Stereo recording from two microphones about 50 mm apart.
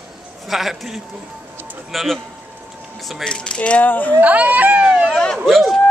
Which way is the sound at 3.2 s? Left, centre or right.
Centre.